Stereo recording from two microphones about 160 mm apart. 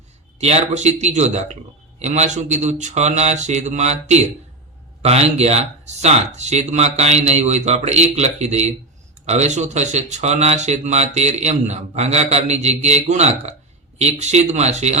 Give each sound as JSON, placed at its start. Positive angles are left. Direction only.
{"t": 0.3, "sound": "speech", "side_deg": -40}